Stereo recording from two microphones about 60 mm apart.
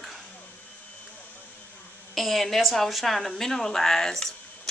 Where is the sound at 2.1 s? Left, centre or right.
Centre.